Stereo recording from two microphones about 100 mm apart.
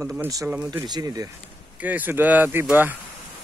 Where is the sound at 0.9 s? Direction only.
40° right (ahead or behind).